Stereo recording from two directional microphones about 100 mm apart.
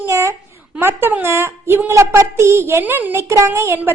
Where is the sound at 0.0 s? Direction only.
25° right (ahead or behind).